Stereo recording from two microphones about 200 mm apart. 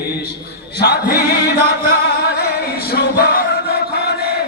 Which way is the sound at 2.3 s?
50° left (ahead or behind).